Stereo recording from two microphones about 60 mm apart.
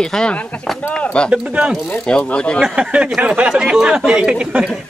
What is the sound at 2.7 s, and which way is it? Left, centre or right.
Speech, centre.